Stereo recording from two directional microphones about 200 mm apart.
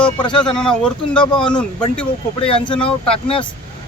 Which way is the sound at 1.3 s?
25° left (ahead or behind).